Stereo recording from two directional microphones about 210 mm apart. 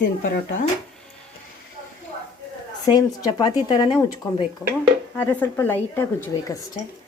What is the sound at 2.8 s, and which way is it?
Speech, 20° left (ahead or behind).